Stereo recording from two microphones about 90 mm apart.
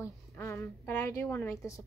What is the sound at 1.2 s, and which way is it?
Speech, 20° left (ahead or behind).